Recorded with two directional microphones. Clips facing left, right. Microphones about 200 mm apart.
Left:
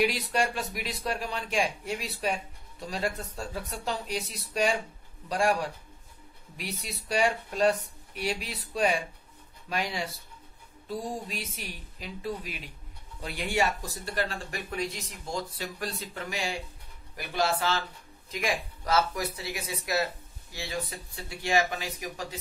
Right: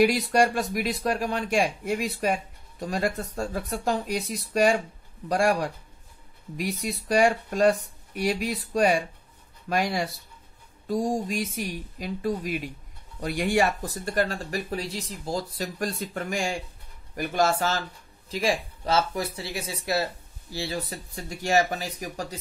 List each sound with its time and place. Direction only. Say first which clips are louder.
0.0 s speech: right 6 dB; 50° right (ahead or behind)
18.3 s speech: right 5 dB; 30° right (ahead or behind)